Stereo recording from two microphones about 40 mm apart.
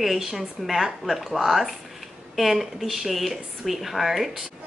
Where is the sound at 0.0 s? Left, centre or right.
Centre.